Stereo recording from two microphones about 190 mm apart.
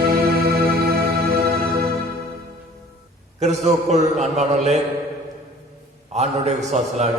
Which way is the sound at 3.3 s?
35° right (ahead or behind).